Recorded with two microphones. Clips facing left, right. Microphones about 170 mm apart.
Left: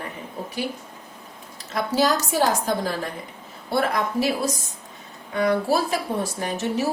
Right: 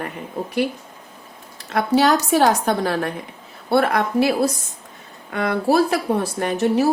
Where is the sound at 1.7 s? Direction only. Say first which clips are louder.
Right 5 dB; 65° right (ahead or behind).